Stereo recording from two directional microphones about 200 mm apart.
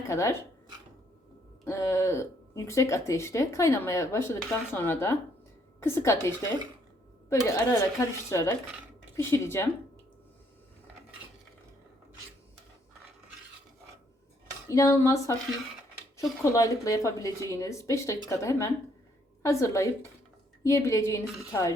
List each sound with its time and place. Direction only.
0.1 s speech: 15° left (ahead or behind)
1.6 s speech: 15° left (ahead or behind)
7.4 s speech: 15° left (ahead or behind)
14.7 s speech: 15° left (ahead or behind)
16.4 s speech: 15° left (ahead or behind)